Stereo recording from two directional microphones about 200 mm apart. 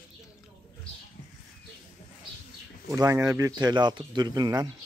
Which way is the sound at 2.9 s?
15° right (ahead or behind).